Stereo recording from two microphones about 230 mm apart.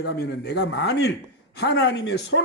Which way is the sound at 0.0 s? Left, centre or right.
Left.